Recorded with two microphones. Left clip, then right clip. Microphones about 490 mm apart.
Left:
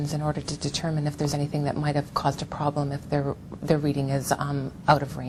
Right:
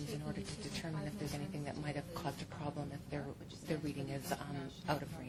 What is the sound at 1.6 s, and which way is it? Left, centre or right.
A woman's voice, left.